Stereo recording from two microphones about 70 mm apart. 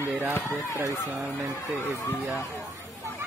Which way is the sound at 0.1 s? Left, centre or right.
Right.